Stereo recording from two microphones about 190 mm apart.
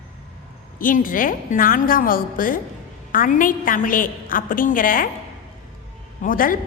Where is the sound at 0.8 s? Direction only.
45° left (ahead or behind).